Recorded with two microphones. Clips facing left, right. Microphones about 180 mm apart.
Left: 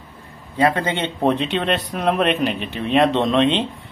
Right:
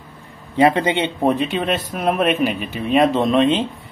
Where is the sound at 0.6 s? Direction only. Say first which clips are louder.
Right 3 dB; 20° right (ahead or behind).